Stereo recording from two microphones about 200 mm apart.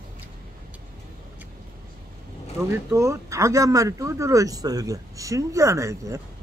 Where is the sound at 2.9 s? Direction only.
15° right (ahead or behind).